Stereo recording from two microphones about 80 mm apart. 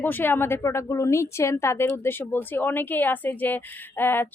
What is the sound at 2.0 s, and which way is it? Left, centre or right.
Speech, left.